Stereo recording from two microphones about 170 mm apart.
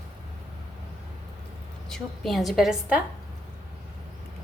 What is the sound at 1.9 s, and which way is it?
A woman's voice, centre (ahead or behind).